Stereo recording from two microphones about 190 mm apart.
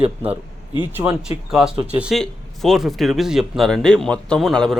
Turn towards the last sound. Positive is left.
turn(degrees=0)  # may be behind; listen again after turning